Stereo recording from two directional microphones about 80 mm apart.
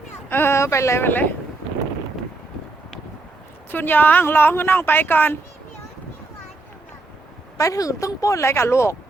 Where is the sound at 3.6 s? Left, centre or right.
Left.